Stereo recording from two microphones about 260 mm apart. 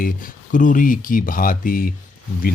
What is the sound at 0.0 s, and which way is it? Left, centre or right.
Speech, left.